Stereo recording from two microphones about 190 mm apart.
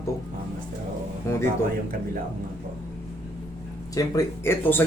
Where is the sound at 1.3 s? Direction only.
15° left (ahead or behind).